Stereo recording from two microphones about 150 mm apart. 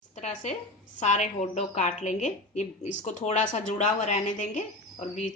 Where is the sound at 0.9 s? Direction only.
50° left (ahead or behind).